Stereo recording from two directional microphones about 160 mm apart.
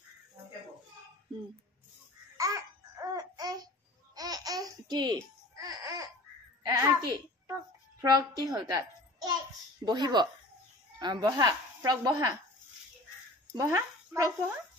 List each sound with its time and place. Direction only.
2.3 s babbling: 20° right (ahead or behind)
5.6 s laughter: 20° right (ahead or behind)
6.6 s a sound: 20° right (ahead or behind)
8.0 s a child's voice: 25° right (ahead or behind)
13.6 s speech: 20° right (ahead or behind)